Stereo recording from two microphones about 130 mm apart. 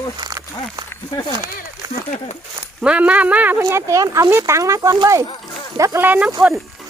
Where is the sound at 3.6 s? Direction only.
25° right (ahead or behind).